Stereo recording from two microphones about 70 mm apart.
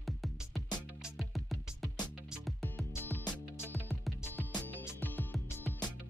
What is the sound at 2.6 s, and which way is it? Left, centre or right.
Music, left.